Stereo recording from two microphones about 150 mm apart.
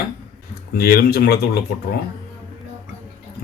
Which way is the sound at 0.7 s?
90° left.